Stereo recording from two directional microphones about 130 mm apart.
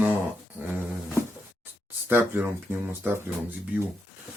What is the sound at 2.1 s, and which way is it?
Speech, 15° right (ahead or behind).